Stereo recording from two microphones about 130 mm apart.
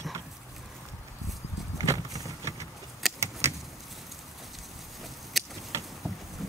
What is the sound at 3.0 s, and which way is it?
Keys jangling, centre (ahead or behind).